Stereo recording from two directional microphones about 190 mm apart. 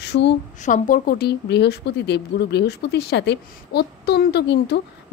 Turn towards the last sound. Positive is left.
turn(degrees=60)  # may be behind; listen again after turning